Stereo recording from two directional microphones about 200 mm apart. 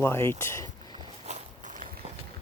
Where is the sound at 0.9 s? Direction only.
35° right (ahead or behind).